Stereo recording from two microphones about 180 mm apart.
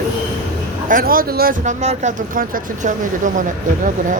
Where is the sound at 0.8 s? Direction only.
50° right (ahead or behind).